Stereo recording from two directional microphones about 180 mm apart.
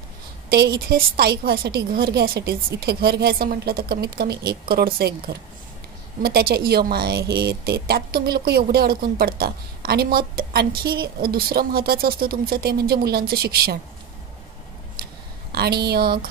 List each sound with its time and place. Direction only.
0.7 s a woman's voice: 55° right (ahead or behind)
15.5 s a woman's voice: 60° right (ahead or behind)